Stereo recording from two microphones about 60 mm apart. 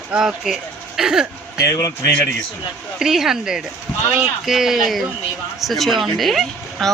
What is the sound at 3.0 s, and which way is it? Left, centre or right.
Speech, centre.